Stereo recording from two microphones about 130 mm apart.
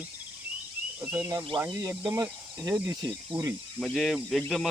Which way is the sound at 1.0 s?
15° right (ahead or behind).